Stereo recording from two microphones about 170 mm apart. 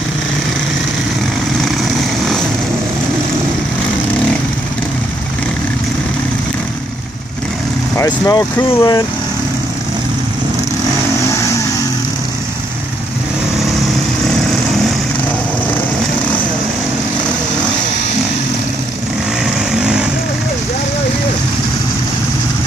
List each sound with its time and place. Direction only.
8.0 s speech: 20° left (ahead or behind)
19.7 s vehicle: 5° right (ahead or behind)